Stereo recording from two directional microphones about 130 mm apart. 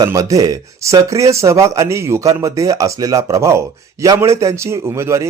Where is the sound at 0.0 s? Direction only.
25° right (ahead or behind).